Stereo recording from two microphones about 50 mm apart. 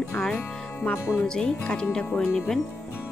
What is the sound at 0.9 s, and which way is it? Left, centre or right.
Speech, left.